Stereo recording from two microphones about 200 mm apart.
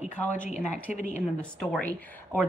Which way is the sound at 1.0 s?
35° left (ahead or behind).